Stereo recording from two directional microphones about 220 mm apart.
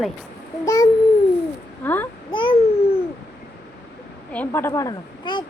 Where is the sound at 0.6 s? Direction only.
15° left (ahead or behind).